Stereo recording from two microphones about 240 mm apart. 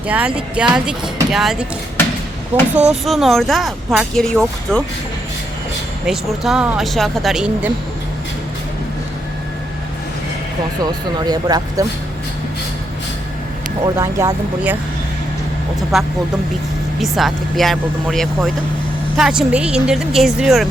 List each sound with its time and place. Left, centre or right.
0.1 s speech: centre
2.7 s speech: centre
6.1 s speech: centre
11.3 s speech: centre
13.8 s speech: centre
15.9 s speech: centre